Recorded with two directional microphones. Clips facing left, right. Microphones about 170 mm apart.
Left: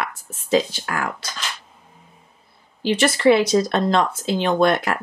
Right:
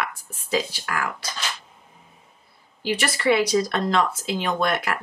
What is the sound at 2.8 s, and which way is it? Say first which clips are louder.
Speech: left 6 dB; 25° left (ahead or behind).